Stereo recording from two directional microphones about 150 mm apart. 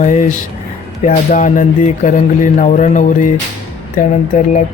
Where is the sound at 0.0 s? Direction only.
55° left (ahead or behind).